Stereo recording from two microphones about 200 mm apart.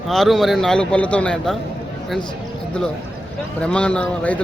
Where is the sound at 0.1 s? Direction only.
Centre (ahead or behind).